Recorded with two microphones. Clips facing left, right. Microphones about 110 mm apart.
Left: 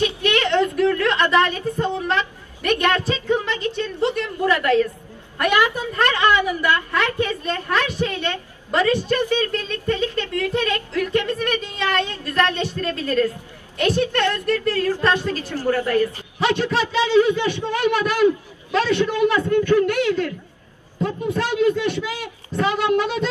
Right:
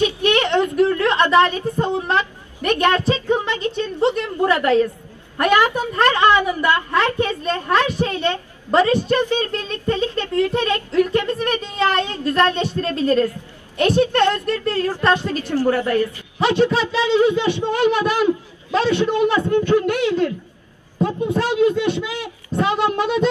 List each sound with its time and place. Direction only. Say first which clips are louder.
0.0 s a sound: right 3 dB; 20° right (ahead or behind)
1.6 s a woman's voice: right 2 dB; 30° right (ahead or behind)
5.4 s a woman's voice: right 3 dB; 45° right (ahead or behind)
5.9 s a woman's voice: right 3 dB; 30° right (ahead or behind)